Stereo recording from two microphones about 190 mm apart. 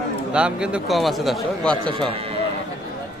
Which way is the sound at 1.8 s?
25° right (ahead or behind).